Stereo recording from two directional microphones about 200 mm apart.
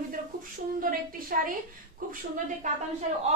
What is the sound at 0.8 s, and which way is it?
A woman's voice, 45° right (ahead or behind).